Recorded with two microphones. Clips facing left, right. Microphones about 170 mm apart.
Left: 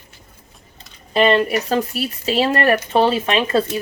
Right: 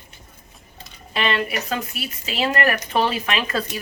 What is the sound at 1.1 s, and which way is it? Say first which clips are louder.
Speech: left 8 dB; 35° left (ahead or behind).